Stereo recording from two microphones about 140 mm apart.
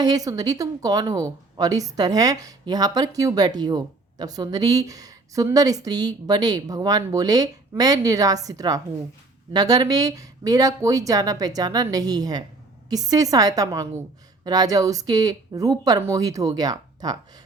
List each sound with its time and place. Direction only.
0.0 s a woman's voice: 25° right (ahead or behind)